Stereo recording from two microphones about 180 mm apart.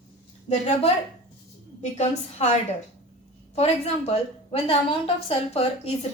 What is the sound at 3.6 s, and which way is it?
A woman's voice, 35° left (ahead or behind).